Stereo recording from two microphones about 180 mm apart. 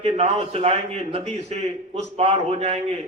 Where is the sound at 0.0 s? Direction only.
35° right (ahead or behind).